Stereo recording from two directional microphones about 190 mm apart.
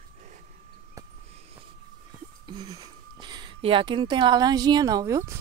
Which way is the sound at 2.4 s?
20° right (ahead or behind).